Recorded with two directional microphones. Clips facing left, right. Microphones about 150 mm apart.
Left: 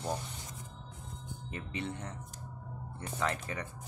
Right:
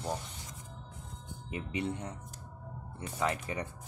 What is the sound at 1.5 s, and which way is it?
Speech, 15° right (ahead or behind).